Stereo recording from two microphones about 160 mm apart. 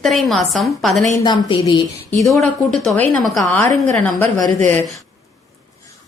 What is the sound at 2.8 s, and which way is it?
A woman's voice, centre (ahead or behind).